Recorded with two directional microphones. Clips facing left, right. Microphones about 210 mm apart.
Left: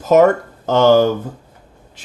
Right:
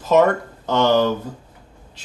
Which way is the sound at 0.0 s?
45° left (ahead or behind).